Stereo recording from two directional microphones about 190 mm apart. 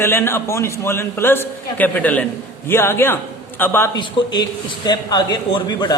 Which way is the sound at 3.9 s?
20° left (ahead or behind).